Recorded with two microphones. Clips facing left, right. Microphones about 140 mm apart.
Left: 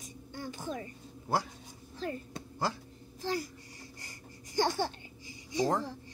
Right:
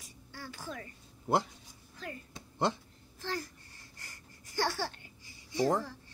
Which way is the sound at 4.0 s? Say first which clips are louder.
Left 5 dB; 15° left (ahead or behind).